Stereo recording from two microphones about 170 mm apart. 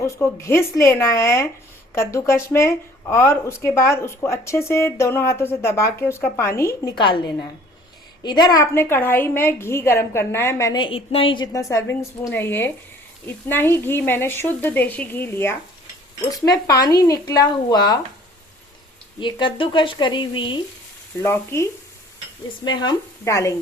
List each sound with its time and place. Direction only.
0.0 s speech: 15° left (ahead or behind)
6.9 s speech: 30° left (ahead or behind)
8.2 s speech: 25° left (ahead or behind)
11.5 s speech: 15° left (ahead or behind)
19.2 s speech: 30° left (ahead or behind)
21.2 s speech: 15° left (ahead or behind)